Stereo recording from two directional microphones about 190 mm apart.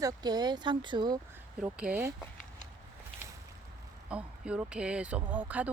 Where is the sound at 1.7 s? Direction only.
5° right (ahead or behind).